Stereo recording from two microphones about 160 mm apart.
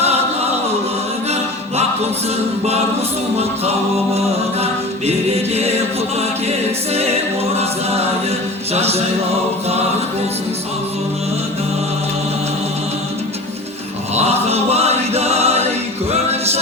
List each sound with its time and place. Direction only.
4.6 s music: 40° right (ahead or behind)
7.5 s a capella: 40° right (ahead or behind)
8.7 s mantra: 40° right (ahead or behind)
14.2 s choir: 40° right (ahead or behind)